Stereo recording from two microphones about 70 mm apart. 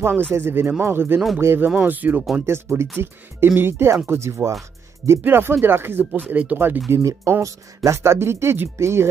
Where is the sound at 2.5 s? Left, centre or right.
Right.